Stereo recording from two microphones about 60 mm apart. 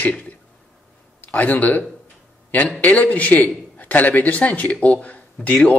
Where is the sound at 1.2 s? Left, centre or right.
Left.